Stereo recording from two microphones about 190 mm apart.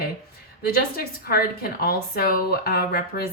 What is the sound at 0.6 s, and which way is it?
A woman's voice, 50° left (ahead or behind).